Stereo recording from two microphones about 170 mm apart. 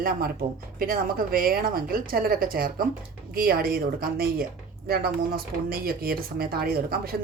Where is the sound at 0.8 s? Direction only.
55° right (ahead or behind).